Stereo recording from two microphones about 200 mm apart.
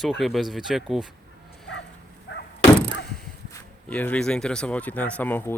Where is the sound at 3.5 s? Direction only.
10° left (ahead or behind).